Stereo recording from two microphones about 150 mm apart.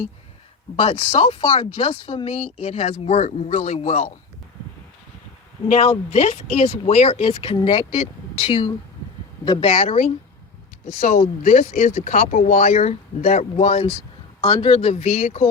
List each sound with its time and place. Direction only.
0.8 s speech: 40° left (ahead or behind)
5.6 s speech: 50° left (ahead or behind); by 9.6 s 30° left (ahead or behind)
9.6 s speech: 45° left (ahead or behind)
14.4 s speech: 40° left (ahead or behind)